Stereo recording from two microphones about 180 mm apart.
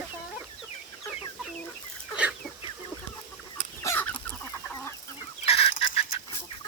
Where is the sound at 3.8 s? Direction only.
10° left (ahead or behind).